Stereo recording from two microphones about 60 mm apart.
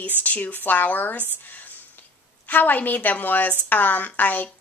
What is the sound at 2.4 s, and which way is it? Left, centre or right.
Speech, left.